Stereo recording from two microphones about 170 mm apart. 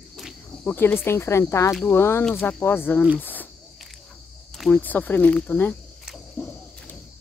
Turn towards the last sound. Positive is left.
turn(degrees=15)  # may be behind; listen again after turning